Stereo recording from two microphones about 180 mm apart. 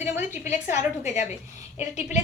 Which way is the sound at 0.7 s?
40° left (ahead or behind).